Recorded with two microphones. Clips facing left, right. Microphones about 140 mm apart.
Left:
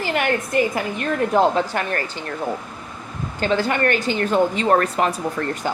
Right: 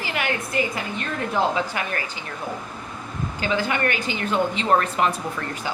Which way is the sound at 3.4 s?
45° left (ahead or behind).